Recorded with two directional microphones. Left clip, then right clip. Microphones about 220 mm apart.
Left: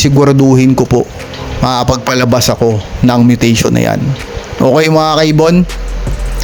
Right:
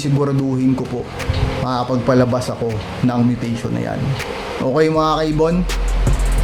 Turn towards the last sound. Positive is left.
turn(degrees=35)  # may be behind; listen again after turning